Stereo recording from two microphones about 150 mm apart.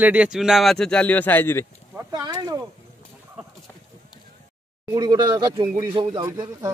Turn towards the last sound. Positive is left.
turn(degrees=-30)  # may be behind; listen again after turning